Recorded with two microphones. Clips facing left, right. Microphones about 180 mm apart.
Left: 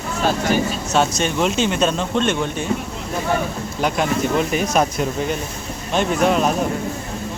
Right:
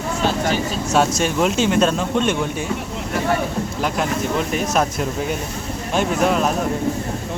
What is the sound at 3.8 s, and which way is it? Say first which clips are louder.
Speech: left 4 dB; centre (ahead or behind).